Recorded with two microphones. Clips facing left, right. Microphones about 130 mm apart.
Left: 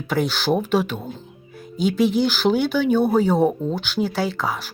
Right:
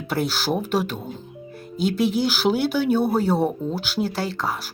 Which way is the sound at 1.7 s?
5° right (ahead or behind).